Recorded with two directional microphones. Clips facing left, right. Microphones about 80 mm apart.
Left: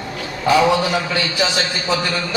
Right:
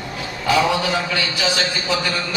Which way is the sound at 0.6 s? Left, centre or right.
Left.